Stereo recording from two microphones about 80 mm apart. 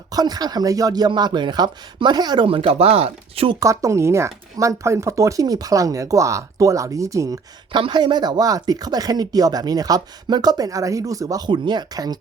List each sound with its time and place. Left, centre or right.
0.1 s speech: right
3.6 s speech: right
7.7 s speech: right
11.4 s speech: right